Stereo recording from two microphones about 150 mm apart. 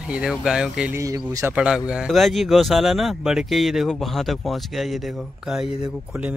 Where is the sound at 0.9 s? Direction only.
20° right (ahead or behind).